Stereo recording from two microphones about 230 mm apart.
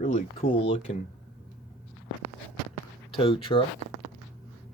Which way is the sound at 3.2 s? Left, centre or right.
Left.